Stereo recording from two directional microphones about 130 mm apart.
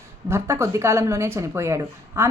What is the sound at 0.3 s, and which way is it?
Speech, 20° right (ahead or behind).